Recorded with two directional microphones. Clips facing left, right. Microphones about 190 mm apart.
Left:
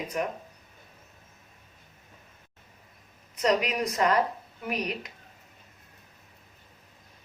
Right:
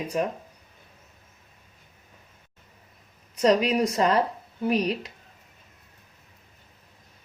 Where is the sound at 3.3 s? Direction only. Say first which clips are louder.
Right 5 dB; 30° right (ahead or behind).